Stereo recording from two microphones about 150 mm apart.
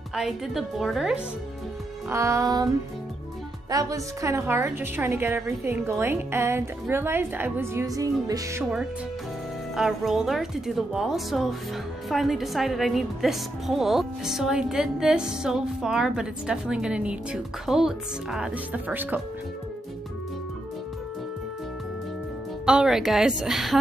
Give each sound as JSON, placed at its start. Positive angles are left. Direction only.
{"t": 0.1, "sound": "a woman's voice", "side_deg": 0}
{"t": 2.0, "sound": "music", "side_deg": -20}
{"t": 3.7, "sound": "a woman's voice", "side_deg": -20}
{"t": 9.8, "sound": "a woman's voice", "side_deg": -5}
{"t": 22.7, "sound": "a woman's voice", "side_deg": -5}